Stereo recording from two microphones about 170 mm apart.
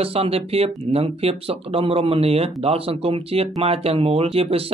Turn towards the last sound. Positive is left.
turn(degrees=-35)  # may be behind; listen again after turning